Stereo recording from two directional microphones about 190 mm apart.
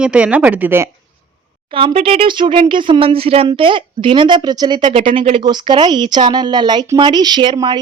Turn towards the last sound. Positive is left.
turn(degrees=-25)  # may be behind; listen again after turning